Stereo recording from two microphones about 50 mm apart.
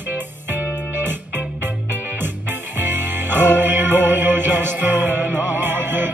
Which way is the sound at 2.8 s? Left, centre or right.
Right.